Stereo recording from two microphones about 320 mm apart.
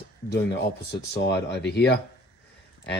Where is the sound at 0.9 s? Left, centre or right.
Left.